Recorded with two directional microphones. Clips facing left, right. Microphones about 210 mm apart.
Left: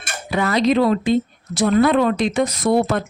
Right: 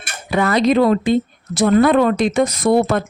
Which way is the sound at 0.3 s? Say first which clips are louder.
Right 2 dB; 55° right (ahead or behind).